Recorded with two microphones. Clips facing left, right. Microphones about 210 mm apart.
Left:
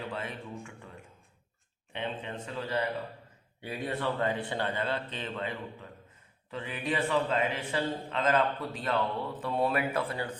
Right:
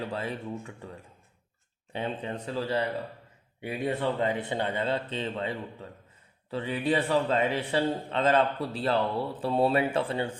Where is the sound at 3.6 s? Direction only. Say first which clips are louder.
Right 4 dB; 20° right (ahead or behind).